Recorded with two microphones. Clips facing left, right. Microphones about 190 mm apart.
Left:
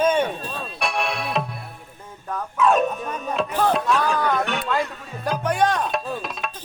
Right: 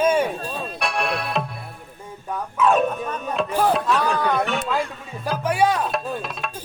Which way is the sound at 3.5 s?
5° right (ahead or behind).